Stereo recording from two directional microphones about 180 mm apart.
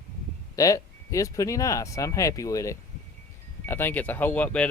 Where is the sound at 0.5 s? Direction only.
20° left (ahead or behind).